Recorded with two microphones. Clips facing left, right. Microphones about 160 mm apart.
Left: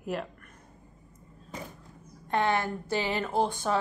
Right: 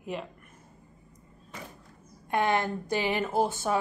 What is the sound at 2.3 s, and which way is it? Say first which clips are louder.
A woman's voice: right 1 dB; 15° right (ahead or behind).